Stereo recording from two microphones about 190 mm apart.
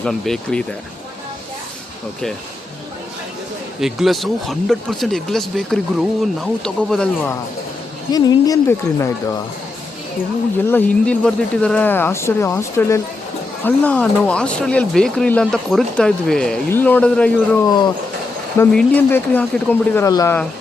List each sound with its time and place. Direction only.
0.0 s speech: 5° left (ahead or behind)
3.8 s speech: centre (ahead or behind)
8.1 s speech: 20° left (ahead or behind)
10.7 s speech: 10° left (ahead or behind)
18.7 s speech: 5° left (ahead or behind)